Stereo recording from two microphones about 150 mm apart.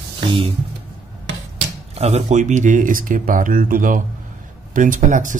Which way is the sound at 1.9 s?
45° right (ahead or behind).